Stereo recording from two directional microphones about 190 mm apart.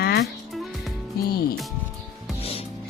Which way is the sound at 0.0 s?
55° left (ahead or behind).